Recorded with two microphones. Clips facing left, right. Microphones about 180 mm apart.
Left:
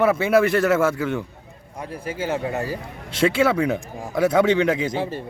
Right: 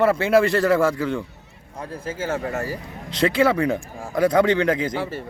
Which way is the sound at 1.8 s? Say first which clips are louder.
Left 1 dB; 15° left (ahead or behind).